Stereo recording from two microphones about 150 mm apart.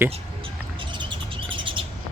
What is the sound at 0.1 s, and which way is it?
Chirp, 35° right (ahead or behind).